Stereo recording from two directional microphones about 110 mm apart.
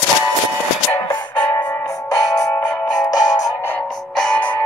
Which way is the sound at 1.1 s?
40° left (ahead or behind).